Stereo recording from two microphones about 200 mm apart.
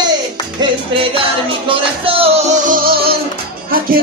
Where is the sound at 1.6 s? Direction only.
25° right (ahead or behind); by 3.1 s 45° right (ahead or behind).